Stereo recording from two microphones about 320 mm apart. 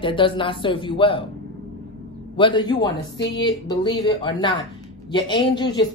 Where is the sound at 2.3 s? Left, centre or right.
Centre.